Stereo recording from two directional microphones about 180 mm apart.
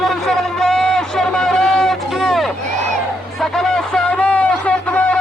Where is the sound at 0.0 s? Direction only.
Centre (ahead or behind).